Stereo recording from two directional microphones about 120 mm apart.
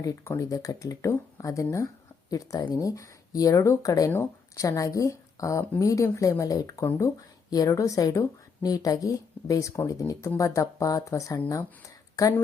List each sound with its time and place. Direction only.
0.0 s a woman's voice: 25° left (ahead or behind)